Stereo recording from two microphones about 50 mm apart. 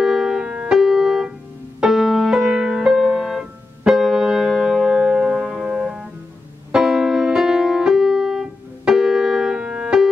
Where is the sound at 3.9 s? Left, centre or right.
Centre.